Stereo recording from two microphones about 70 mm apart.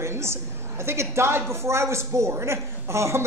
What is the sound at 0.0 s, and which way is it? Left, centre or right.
A woman's voice, right.